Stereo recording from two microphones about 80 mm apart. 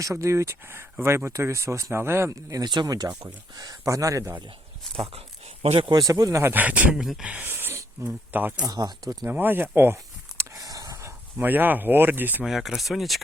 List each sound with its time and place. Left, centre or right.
0.0 s speech: right
2.3 s speech: right
2.6 s speech: right
6.0 s speech: right
6.4 s speech: right
7.0 s speech: centre
7.3 s speech: right
8.6 s speech: right
9.2 s speech: right
10.5 s a sound: right
11.0 s speech: right
12.5 s speech: centre